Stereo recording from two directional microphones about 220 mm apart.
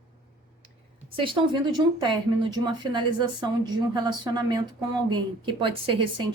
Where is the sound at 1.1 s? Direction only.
20° right (ahead or behind).